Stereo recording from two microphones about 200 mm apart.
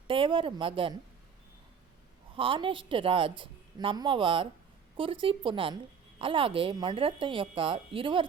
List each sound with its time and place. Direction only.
0.1 s a woman's voice: 25° right (ahead or behind)
2.3 s a woman's voice: 25° right (ahead or behind)